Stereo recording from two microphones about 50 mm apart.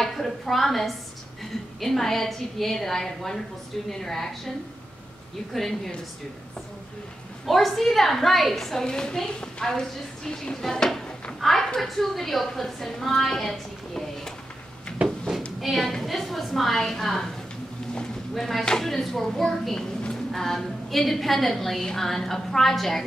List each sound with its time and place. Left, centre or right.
0.0 s a woman's voice: centre
5.5 s a woman's voice: centre
7.4 s a woman's voice: centre
15.0 s a sound: right
15.6 s a woman's voice: centre
18.3 s a woman's voice: centre